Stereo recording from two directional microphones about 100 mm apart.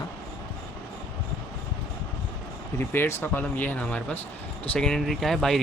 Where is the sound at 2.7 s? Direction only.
20° left (ahead or behind).